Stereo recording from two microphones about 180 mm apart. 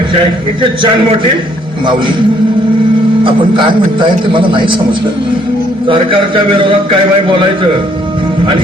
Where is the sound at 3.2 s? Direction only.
25° right (ahead or behind).